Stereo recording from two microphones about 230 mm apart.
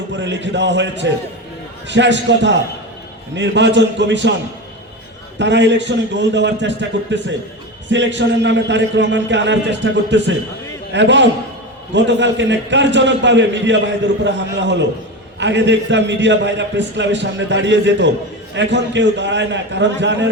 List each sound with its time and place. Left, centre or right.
0.1 s a man's voice: right
5.4 s a man's voice: right